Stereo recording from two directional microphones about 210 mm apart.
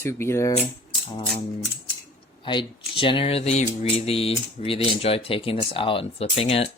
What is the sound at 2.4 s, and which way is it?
Speech, 25° left (ahead or behind).